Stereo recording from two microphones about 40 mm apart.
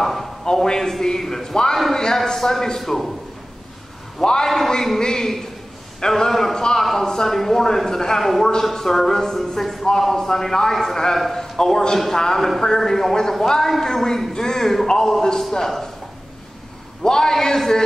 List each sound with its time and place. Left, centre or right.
0.0 s a sound: centre
0.7 s a man's voice: centre
4.2 s a man's voice: centre
11.5 s a man's voice: centre
17.0 s a man's voice: centre